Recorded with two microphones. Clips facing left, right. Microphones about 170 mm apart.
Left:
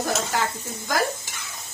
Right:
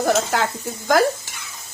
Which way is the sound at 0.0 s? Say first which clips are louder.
Right 6 dB; 70° right (ahead or behind).